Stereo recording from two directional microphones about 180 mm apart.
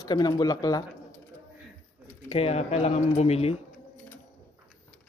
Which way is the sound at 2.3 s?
35° left (ahead or behind).